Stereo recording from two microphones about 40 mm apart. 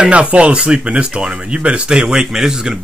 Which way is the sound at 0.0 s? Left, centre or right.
Right.